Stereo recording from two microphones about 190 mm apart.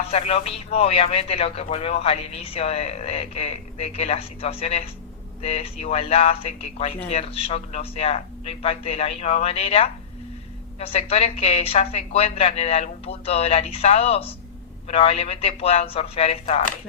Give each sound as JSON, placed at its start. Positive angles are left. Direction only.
{"t": 0.1, "sound": "a man's voice", "side_deg": 35}